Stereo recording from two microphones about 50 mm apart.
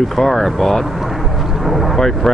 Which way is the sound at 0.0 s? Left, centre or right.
Centre.